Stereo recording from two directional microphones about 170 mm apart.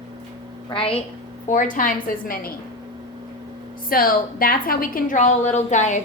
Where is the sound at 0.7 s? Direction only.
30° left (ahead or behind).